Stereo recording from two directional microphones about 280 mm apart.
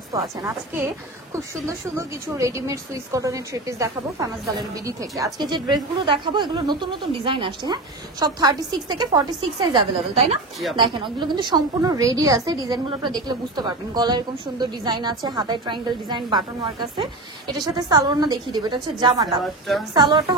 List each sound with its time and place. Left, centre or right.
0.1 s a woman's voice: centre
17.7 s a woman's voice: centre